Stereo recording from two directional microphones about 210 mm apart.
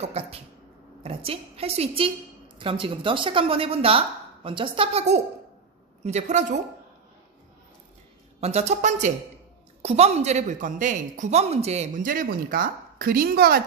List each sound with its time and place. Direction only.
0.0 s a woman's voice: 30° right (ahead or behind)
8.4 s a woman's voice: 30° right (ahead or behind); by 13.6 s 45° right (ahead or behind)